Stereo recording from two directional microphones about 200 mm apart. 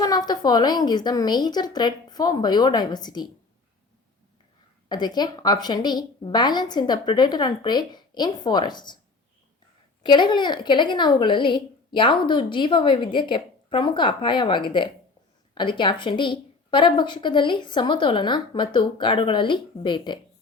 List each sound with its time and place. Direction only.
0.0 s a woman's voice: 20° left (ahead or behind)
4.9 s a woman's voice: 20° left (ahead or behind)
10.0 s a woman's voice: 20° left (ahead or behind)